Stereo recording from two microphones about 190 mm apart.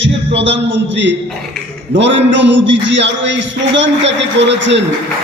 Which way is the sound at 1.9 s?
70° right (ahead or behind).